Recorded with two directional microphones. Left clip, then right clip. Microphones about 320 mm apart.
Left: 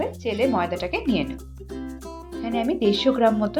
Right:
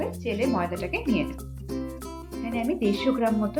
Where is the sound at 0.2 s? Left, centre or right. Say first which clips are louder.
Left 4 dB; centre.